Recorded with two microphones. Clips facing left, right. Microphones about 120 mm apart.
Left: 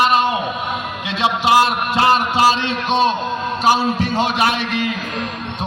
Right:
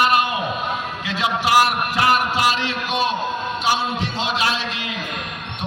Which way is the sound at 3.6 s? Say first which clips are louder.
Left 6 dB; 45° left (ahead or behind).